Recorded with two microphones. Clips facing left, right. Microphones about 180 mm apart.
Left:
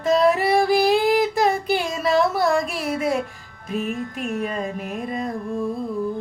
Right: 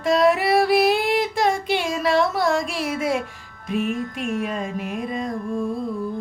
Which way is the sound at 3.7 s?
40° left (ahead or behind).